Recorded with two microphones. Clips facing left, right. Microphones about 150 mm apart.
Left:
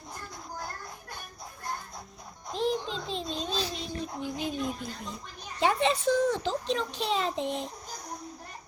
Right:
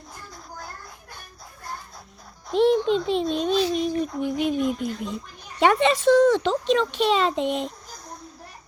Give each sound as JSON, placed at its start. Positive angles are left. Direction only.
{"t": 2.6, "sound": "a child's voice", "side_deg": -70}